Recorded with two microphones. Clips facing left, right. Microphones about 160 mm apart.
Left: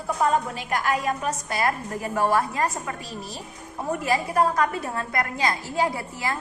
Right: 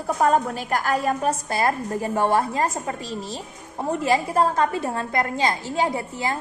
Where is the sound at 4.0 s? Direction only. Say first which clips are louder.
Right 2 dB; 30° right (ahead or behind).